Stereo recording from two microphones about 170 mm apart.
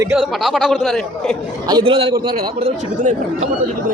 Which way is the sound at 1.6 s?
25° right (ahead or behind).